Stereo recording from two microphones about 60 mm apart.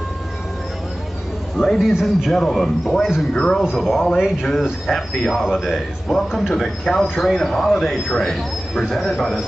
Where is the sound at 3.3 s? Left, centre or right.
Centre.